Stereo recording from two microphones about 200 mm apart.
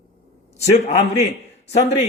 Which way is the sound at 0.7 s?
35° left (ahead or behind).